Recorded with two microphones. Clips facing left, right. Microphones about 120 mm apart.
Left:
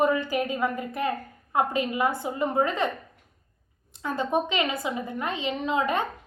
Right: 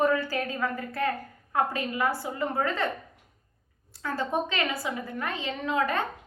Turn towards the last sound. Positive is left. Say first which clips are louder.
# left 2 dB
turn(degrees=20)  # may be behind; listen again after turning